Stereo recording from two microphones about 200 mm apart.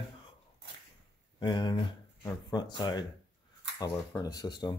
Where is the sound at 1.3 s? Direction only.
20° left (ahead or behind).